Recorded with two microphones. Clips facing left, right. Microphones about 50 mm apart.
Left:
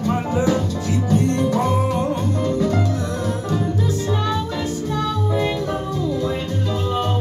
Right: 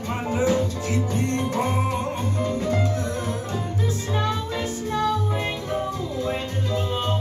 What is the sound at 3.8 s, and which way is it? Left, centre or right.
Music, right.